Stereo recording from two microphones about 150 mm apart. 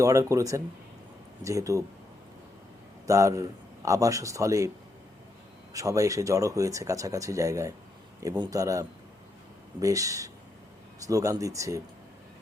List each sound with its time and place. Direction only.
0.0 s speech: 20° right (ahead or behind)
3.1 s speech: 20° right (ahead or behind)
5.7 s speech: 20° right (ahead or behind)